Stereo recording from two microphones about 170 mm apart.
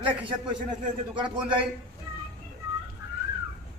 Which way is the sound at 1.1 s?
30° right (ahead or behind).